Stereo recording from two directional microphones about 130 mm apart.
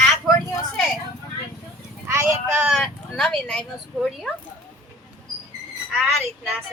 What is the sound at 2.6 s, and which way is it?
A woman's voice, 5° right (ahead or behind).